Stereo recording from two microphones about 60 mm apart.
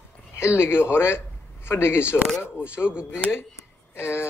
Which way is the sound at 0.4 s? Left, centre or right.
Left.